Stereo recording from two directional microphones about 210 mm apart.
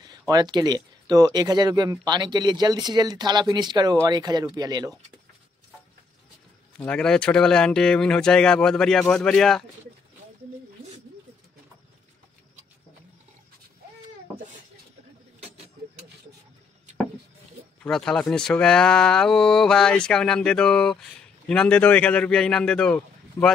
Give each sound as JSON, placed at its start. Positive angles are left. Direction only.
{"t": 0.3, "sound": "speech", "side_deg": -20}
{"t": 6.8, "sound": "speech", "side_deg": 5}
{"t": 17.8, "sound": "speech", "side_deg": 5}